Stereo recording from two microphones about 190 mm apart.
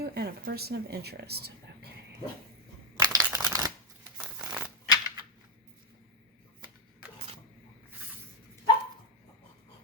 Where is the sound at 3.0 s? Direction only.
20° right (ahead or behind).